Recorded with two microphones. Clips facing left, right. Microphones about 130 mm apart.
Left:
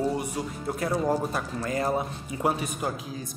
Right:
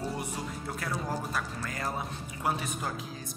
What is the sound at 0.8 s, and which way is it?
A man's voice, 30° left (ahead or behind).